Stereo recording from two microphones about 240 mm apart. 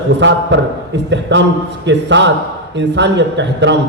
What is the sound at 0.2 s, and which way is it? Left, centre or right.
A man's voice, right.